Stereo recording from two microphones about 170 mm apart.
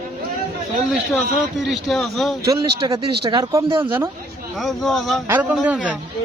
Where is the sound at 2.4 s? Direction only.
30° right (ahead or behind).